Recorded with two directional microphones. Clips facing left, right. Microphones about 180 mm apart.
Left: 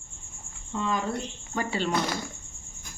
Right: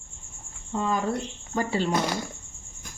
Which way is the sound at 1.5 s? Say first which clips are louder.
Right 3 dB; 35° right (ahead or behind).